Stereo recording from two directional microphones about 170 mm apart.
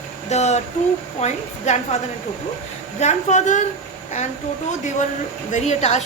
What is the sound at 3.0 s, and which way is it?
Speech, 45° left (ahead or behind).